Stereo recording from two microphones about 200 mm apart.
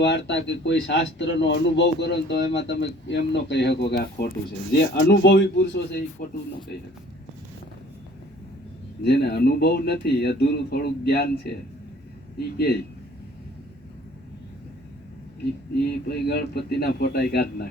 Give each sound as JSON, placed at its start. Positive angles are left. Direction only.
{"t": 0.0, "sound": "speech", "side_deg": 60}
{"t": 9.0, "sound": "speech", "side_deg": 55}
{"t": 12.4, "sound": "speech", "side_deg": 50}
{"t": 16.0, "sound": "speech", "side_deg": 55}